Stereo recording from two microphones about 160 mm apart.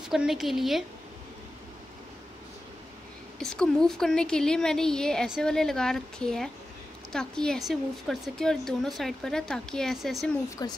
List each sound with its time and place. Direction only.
0.1 s a woman's voice: centre (ahead or behind)
3.3 s a woman's voice: 5° left (ahead or behind)
10.6 s speech: 25° left (ahead or behind)